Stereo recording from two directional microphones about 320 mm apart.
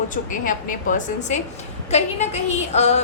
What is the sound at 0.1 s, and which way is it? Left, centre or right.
A woman's voice, left.